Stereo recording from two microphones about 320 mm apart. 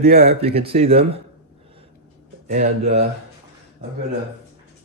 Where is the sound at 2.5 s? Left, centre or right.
Right.